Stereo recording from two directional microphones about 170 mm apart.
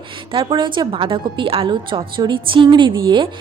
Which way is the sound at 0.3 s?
30° right (ahead or behind).